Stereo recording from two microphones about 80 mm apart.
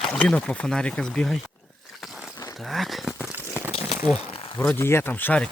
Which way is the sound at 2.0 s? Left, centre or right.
Centre.